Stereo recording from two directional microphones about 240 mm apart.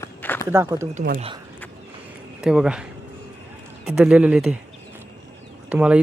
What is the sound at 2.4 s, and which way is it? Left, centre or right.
Speech, centre.